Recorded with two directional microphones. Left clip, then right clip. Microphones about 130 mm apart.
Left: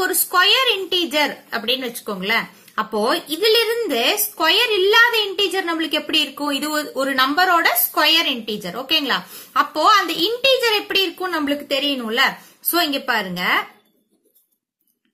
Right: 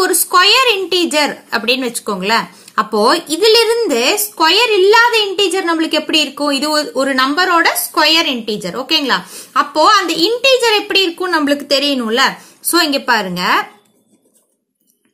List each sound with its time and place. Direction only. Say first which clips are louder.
0.0 s a woman's voice: right 6 dB; 35° right (ahead or behind)